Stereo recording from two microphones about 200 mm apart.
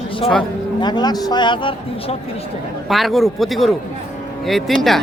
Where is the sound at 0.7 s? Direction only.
20° left (ahead or behind).